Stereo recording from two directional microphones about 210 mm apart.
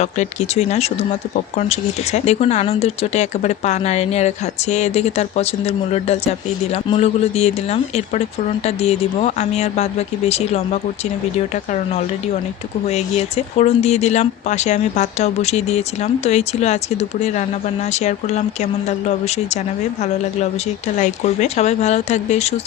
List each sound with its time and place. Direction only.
0.0 s speech: 30° left (ahead or behind)
12.9 s speech: 30° left (ahead or behind)
21.0 s speech: 30° left (ahead or behind)